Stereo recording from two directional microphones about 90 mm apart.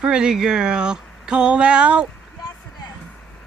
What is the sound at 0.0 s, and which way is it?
Speech, 10° right (ahead or behind).